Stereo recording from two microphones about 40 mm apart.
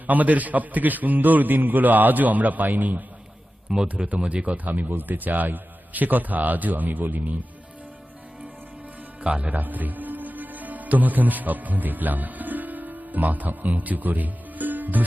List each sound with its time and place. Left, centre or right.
0.1 s a man's voice: right
3.7 s speech: centre
4.1 s a man's voice: right
9.2 s a man's voice: right